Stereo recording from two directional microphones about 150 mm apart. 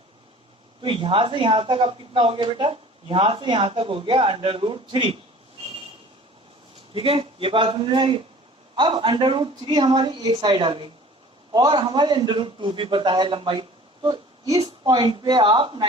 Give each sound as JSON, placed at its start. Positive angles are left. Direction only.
{"t": 0.8, "sound": "speech", "side_deg": -35}
{"t": 6.9, "sound": "a man's voice", "side_deg": -40}